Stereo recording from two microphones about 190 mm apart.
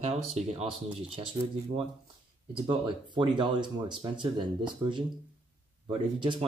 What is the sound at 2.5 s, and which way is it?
Speech, 25° right (ahead or behind).